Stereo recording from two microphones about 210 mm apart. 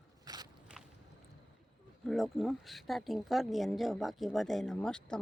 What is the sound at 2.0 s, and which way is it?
Speech, centre (ahead or behind).